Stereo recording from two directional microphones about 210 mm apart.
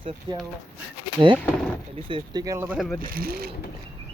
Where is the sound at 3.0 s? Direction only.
45° right (ahead or behind).